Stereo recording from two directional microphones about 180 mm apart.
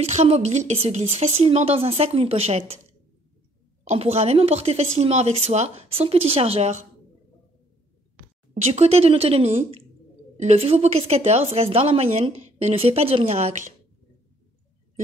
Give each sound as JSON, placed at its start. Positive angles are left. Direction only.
{"t": 0.0, "sound": "speech", "side_deg": -35}
{"t": 3.8, "sound": "speech", "side_deg": -35}
{"t": 8.5, "sound": "speech", "side_deg": -40}